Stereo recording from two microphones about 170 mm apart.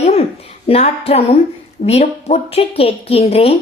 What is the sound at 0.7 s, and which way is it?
A woman's voice, 35° left (ahead or behind).